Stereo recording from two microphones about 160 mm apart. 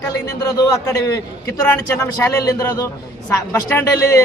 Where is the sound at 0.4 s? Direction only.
20° left (ahead or behind).